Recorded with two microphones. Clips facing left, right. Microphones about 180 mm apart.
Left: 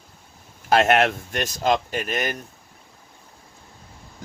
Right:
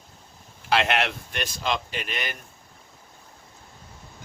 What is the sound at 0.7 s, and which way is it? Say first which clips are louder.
Speech: left 6 dB; 45° left (ahead or behind).